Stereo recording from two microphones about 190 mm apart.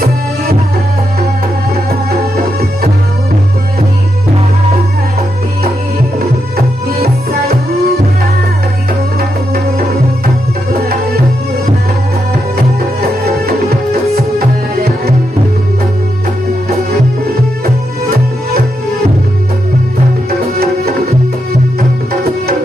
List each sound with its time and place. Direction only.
2.0 s music: 55° right (ahead or behind)
7.0 s music: 55° right (ahead or behind)
20.5 s music: 55° right (ahead or behind)